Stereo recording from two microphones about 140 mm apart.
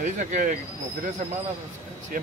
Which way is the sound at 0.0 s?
60° right (ahead or behind).